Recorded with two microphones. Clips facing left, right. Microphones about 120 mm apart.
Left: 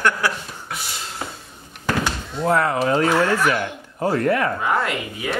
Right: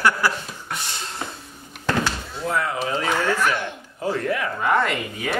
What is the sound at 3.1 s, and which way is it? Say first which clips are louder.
Speech: left 3 dB; centre (ahead or behind).